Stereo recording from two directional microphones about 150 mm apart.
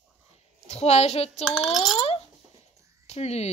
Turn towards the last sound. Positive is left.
turn(degrees=45)  # may be behind; listen again after turning